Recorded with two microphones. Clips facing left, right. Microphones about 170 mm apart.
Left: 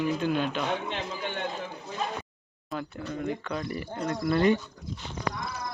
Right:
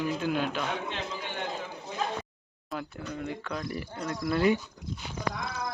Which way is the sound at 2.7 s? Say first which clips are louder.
Left 2 dB; centre (ahead or behind).